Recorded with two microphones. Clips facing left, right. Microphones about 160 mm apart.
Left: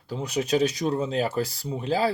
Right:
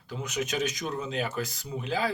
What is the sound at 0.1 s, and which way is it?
Speech, 35° left (ahead or behind).